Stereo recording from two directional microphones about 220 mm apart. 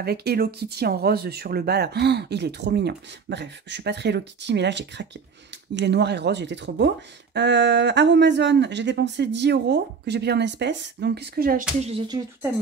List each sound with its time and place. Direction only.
0.0 s speech: 45° right (ahead or behind)
11.8 s speech: 25° right (ahead or behind)